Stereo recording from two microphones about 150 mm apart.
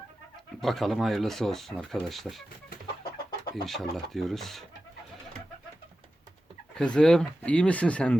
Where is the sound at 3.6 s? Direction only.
Centre (ahead or behind).